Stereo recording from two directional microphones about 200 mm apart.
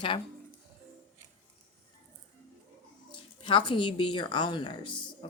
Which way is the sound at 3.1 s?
25° left (ahead or behind).